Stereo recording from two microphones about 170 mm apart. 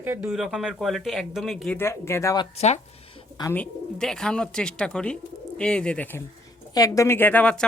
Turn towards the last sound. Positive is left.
turn(degrees=10)  # may be behind; listen again after turning